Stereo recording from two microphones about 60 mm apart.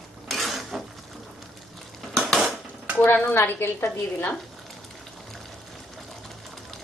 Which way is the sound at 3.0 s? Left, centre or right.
Left.